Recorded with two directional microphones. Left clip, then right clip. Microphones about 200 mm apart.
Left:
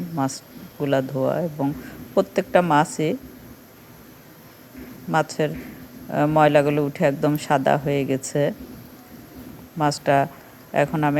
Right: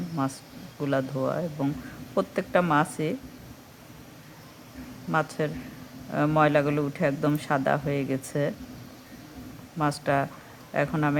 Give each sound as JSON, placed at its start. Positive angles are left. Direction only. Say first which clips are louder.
{"t": 0.2, "sound": "a man's voice", "louder": "left 5 dB", "side_deg": 15}
{"t": 5.1, "sound": "a man's voice", "louder": "left 5 dB", "side_deg": 15}
{"t": 9.7, "sound": "a man's voice", "louder": "left 6 dB", "side_deg": 15}